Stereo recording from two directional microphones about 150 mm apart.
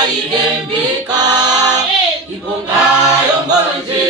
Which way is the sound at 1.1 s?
25° right (ahead or behind).